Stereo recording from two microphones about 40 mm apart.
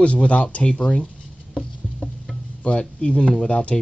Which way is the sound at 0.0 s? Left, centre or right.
Left.